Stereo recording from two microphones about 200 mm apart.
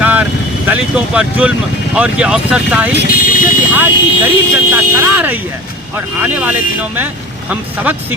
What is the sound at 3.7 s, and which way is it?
Speech, 10° right (ahead or behind).